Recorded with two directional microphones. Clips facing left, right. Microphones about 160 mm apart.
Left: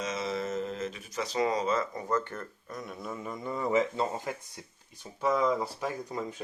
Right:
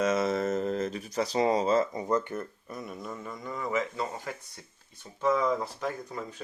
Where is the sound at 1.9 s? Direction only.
15° right (ahead or behind); by 3.2 s 5° left (ahead or behind).